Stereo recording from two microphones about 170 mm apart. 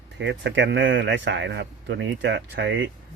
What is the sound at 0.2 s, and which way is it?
A man's voice, 90° right.